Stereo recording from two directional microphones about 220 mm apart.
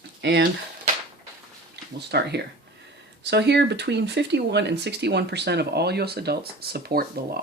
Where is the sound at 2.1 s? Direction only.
50° right (ahead or behind).